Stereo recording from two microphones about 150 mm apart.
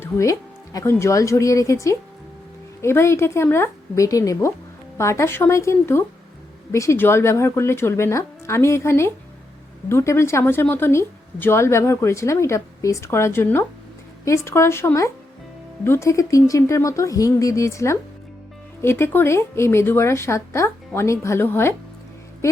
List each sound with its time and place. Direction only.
0.0 s speech: 20° left (ahead or behind)